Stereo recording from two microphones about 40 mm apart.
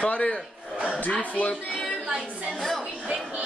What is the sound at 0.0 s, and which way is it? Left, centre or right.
Speech, left.